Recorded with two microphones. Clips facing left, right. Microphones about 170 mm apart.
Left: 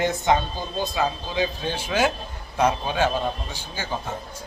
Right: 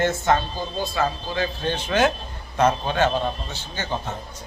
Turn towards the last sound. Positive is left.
turn(degrees=10)  # may be behind; listen again after turning